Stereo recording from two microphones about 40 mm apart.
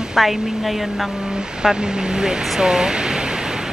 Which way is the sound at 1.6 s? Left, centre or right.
Centre.